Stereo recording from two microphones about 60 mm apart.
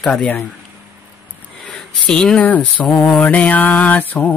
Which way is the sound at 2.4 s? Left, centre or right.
Left.